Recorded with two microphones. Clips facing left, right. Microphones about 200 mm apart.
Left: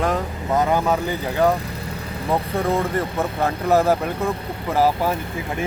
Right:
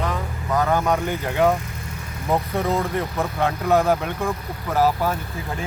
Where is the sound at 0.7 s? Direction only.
10° left (ahead or behind).